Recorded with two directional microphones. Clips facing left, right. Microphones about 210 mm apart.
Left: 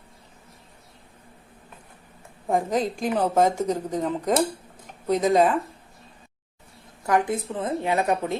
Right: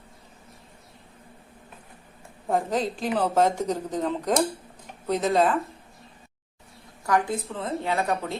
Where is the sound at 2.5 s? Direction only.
10° left (ahead or behind).